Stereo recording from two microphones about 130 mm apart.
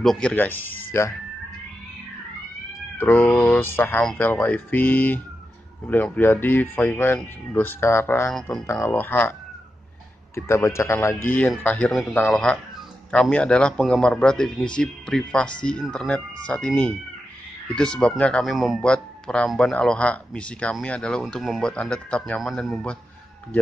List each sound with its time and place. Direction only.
0.0 s speech: 5° left (ahead or behind)
3.0 s speech: 15° left (ahead or behind)
8.3 s speech: 5° left (ahead or behind)
8.8 s speech: 15° left (ahead or behind)
10.3 s a man's voice: 20° left (ahead or behind); by 22.9 s 5° left (ahead or behind)